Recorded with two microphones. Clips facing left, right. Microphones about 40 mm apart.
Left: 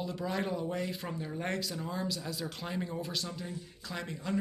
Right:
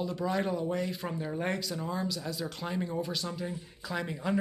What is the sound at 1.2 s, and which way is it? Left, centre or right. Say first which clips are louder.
Speech: right 3 dB; centre.